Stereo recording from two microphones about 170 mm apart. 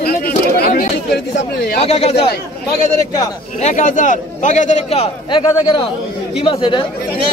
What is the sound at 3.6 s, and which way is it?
A man's voice, 45° left (ahead or behind).